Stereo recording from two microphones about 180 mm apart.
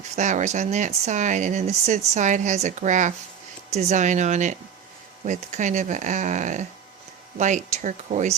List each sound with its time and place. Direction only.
0.0 s speech: 45° right (ahead or behind)